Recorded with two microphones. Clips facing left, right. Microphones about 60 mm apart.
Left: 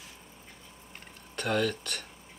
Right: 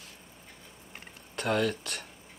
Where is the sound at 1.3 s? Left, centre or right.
Centre.